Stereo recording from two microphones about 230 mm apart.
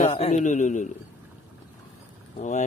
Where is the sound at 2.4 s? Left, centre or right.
Left.